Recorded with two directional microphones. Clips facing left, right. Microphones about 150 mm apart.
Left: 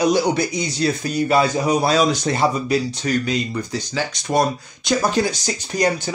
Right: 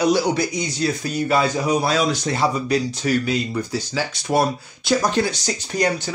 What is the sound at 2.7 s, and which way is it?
Speech, 5° right (ahead or behind).